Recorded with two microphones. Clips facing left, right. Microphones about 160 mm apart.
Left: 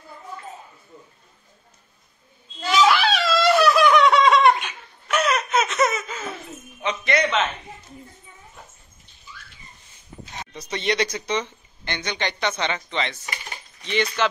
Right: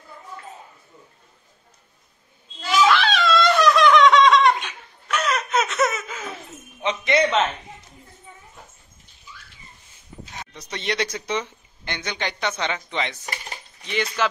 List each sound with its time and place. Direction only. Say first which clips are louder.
2.9 s dog: right 1 dB; 5° left (ahead or behind)
6.8 s a sound: right 2 dB; 20° right (ahead or behind)
10.4 s speech: left 4 dB; centre (ahead or behind)